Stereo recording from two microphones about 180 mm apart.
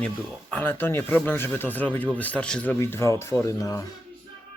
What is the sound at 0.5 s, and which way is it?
Speech, 10° left (ahead or behind).